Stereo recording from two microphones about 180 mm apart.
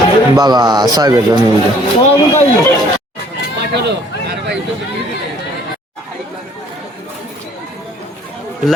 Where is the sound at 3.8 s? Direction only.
70° right (ahead or behind).